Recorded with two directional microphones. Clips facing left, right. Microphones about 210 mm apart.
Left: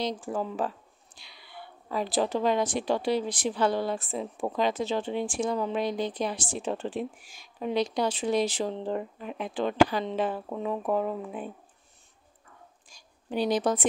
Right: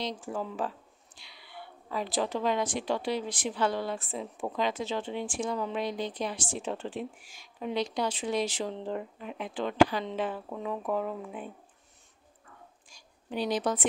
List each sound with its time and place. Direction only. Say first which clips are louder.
0.0 s speech: left 4 dB; 40° left (ahead or behind)
13.3 s speech: left 4 dB; 40° left (ahead or behind)